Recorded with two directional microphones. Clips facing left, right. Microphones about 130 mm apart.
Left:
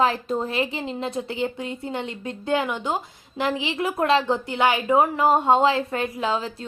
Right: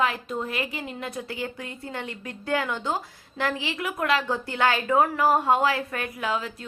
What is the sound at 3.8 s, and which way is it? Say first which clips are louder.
A woman's voice: left 5 dB; 30° left (ahead or behind).